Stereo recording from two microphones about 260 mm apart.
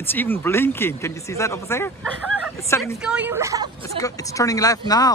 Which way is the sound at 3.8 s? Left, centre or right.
Centre.